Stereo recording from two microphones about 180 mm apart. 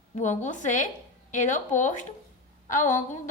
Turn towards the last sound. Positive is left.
turn(degrees=45)  # may be behind; listen again after turning